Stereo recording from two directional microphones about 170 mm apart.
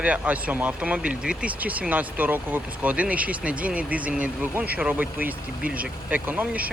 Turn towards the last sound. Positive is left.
turn(degrees=-10)  # may be behind; listen again after turning